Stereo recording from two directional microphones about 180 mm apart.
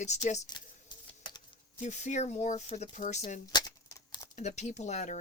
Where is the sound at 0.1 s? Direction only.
40° left (ahead or behind).